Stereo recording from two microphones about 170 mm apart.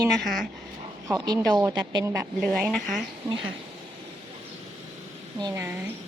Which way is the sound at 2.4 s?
5° left (ahead or behind).